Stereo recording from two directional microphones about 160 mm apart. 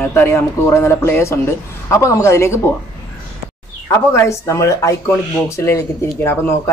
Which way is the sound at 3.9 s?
20° left (ahead or behind).